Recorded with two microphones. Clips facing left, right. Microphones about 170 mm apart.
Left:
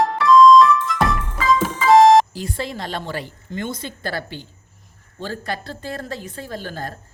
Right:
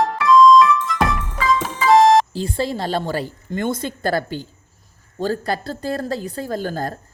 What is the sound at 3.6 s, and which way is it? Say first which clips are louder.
A woman's voice: right 9 dB; 50° right (ahead or behind).